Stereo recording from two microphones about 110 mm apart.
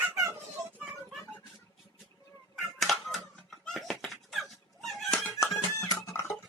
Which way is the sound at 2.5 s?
Centre (ahead or behind).